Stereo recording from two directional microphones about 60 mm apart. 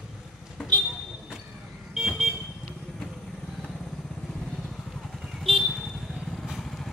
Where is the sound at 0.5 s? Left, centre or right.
Centre.